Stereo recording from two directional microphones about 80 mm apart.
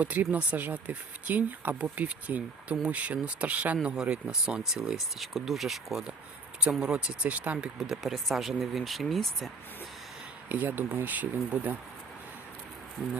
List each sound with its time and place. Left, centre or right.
0.0 s speech: right
7.8 s speech: centre
10.5 s speech: right